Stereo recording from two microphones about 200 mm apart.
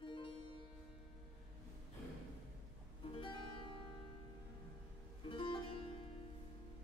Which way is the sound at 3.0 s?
25° left (ahead or behind).